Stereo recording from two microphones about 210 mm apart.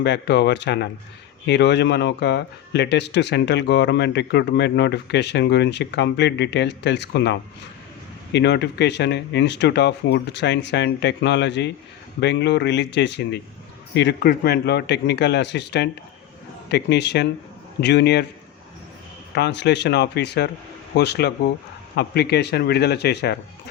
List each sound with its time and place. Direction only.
0.0 s speech: 55° left (ahead or behind)
19.3 s speech: 55° left (ahead or behind)